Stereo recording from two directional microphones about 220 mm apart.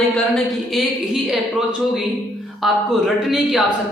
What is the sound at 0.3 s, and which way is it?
Speech, centre (ahead or behind).